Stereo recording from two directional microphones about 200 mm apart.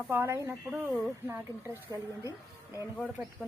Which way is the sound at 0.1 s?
10° right (ahead or behind).